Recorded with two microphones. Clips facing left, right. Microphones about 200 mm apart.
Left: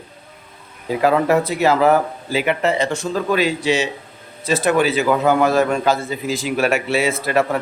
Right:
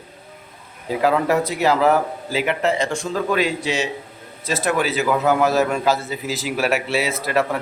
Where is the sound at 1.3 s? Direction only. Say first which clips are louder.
Left 2 dB; 55° left (ahead or behind).